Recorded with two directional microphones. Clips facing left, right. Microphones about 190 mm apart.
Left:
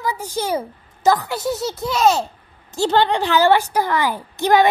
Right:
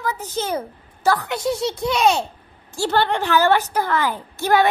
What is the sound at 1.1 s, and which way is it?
A woman's voice, 10° left (ahead or behind).